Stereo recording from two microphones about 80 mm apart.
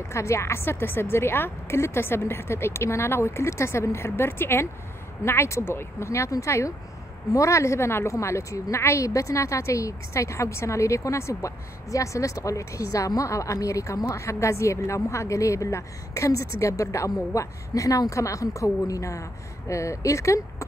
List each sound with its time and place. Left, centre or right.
0.1 s a woman's voice: left